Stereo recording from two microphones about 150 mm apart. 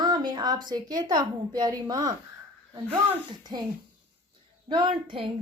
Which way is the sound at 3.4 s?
25° right (ahead or behind).